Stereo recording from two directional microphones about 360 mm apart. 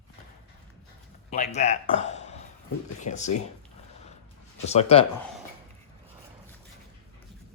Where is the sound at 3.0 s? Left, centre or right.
Centre.